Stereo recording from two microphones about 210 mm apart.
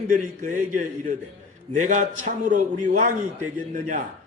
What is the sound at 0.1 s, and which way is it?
A man's voice, 40° right (ahead or behind).